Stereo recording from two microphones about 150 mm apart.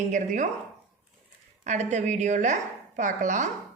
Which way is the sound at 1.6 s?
50° right (ahead or behind).